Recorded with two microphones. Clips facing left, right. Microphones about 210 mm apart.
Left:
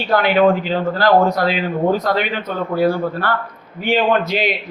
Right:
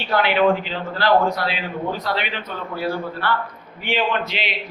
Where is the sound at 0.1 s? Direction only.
45° left (ahead or behind).